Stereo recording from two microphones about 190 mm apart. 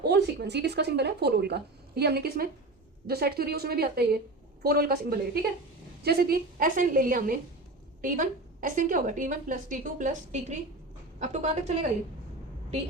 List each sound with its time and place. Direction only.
0.0 s a woman's voice: 60° right (ahead or behind); by 11.9 s 40° right (ahead or behind)